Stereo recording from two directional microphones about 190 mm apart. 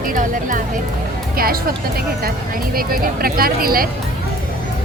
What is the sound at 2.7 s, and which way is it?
Speech, 50° right (ahead or behind).